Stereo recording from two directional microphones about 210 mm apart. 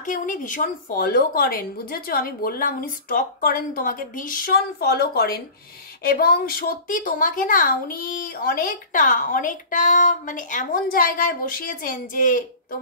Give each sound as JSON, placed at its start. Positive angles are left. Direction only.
{"t": 0.0, "sound": "a woman's voice", "side_deg": 40}